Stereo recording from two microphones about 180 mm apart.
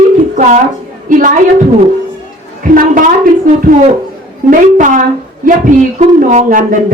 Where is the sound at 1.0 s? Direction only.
45° right (ahead or behind).